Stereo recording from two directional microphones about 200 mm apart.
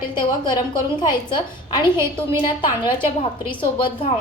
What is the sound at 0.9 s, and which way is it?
Speech, 20° left (ahead or behind).